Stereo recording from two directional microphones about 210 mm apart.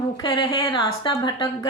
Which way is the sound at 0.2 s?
20° left (ahead or behind).